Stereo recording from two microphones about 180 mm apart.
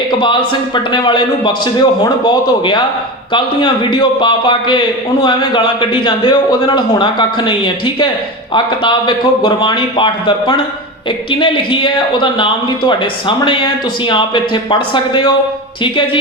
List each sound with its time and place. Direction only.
0.2 s speech: 25° left (ahead or behind)